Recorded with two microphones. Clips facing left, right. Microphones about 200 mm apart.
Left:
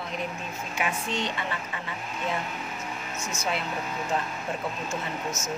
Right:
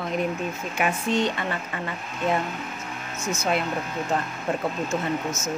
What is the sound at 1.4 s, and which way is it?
Speech, 50° right (ahead or behind).